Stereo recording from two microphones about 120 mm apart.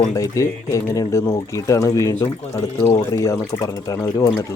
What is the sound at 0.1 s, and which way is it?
Speech, 30° left (ahead or behind).